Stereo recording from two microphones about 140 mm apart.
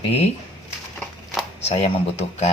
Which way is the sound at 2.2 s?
50° left (ahead or behind).